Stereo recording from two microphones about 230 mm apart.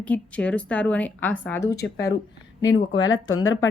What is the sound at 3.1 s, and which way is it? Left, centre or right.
Speech, centre.